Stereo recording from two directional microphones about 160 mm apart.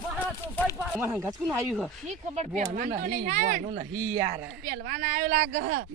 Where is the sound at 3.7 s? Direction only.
25° right (ahead or behind).